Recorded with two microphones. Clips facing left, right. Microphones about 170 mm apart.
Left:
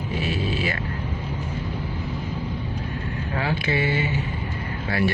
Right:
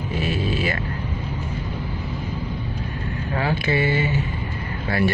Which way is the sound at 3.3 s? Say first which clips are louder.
Right 3 dB; 40° right (ahead or behind).